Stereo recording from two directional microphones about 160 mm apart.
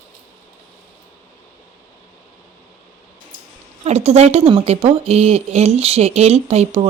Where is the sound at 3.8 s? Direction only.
40° right (ahead or behind).